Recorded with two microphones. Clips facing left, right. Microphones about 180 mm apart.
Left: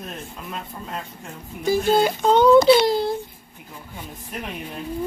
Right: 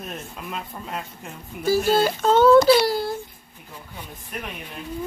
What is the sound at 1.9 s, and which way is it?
A child's voice, 15° left (ahead or behind).